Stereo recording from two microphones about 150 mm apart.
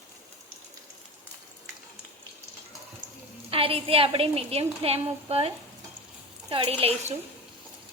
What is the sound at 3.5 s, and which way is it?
A woman's voice, 40° right (ahead or behind).